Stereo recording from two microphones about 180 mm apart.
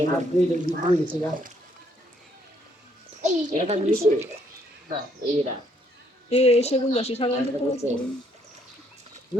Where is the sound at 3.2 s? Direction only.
40° right (ahead or behind).